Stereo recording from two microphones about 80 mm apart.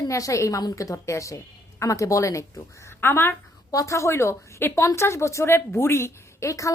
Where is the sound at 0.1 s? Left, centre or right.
Left.